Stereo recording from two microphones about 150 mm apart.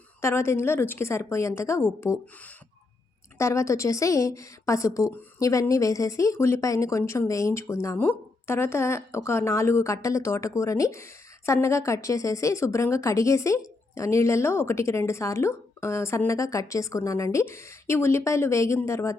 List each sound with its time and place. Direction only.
0.2 s a woman's voice: 20° left (ahead or behind)
3.3 s speech: 20° left (ahead or behind)